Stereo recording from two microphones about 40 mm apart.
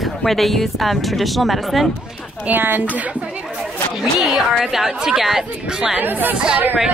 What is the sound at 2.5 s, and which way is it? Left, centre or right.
Speech, right.